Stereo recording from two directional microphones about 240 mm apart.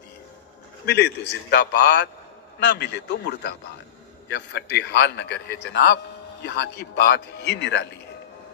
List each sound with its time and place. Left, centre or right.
0.8 s a man's voice: left